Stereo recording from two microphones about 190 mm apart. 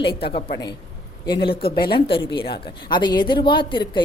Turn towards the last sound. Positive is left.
turn(degrees=25)  # may be behind; listen again after turning